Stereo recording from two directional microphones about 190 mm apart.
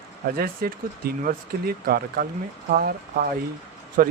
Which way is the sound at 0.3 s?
50° right (ahead or behind).